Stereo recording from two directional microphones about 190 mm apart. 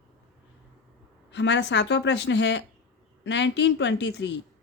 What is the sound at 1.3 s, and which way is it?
Speech, 65° left (ahead or behind).